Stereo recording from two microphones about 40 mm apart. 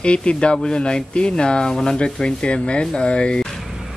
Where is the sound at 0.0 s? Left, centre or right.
Left.